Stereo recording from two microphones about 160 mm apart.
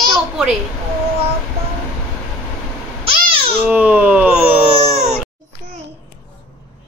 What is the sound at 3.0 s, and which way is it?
Babbling, 35° right (ahead or behind).